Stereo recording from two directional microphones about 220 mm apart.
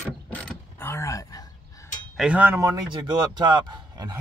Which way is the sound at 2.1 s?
5° right (ahead or behind).